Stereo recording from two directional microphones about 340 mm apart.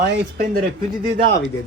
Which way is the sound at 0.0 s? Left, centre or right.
Right.